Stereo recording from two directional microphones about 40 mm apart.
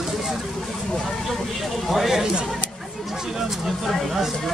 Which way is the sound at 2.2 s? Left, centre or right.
Centre.